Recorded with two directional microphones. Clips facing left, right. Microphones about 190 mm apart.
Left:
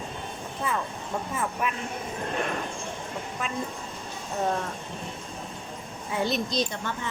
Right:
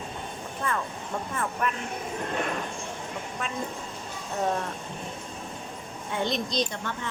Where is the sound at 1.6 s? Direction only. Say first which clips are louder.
Right 2 dB; 10° left (ahead or behind).